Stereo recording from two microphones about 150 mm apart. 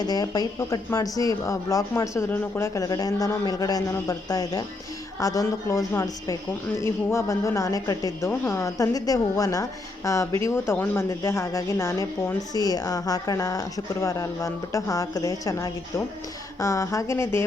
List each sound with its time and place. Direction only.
0.0 s a woman's voice: 25° left (ahead or behind)